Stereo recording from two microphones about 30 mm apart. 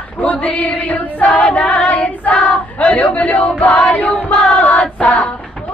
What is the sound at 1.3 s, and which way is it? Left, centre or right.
Female singing, left.